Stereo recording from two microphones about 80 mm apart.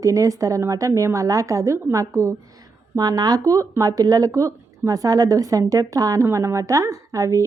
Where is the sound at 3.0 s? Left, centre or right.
Right.